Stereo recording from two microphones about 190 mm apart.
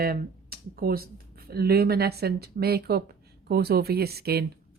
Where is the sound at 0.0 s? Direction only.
50° right (ahead or behind).